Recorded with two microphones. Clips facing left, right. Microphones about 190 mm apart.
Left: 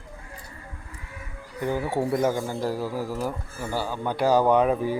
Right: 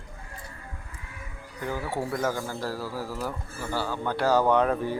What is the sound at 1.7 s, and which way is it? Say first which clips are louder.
Speech: left 5 dB; 20° left (ahead or behind).